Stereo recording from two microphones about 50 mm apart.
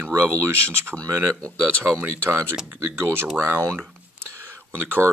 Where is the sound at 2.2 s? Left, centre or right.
Right.